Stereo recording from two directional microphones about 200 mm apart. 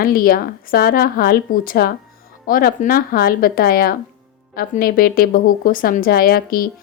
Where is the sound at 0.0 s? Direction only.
45° left (ahead or behind).